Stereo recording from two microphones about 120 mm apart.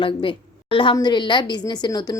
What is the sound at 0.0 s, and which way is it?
A woman's voice, 45° left (ahead or behind).